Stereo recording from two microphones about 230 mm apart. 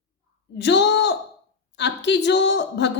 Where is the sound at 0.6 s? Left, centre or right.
Left.